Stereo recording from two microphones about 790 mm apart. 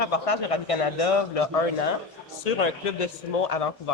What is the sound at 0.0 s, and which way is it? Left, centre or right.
Speech, left.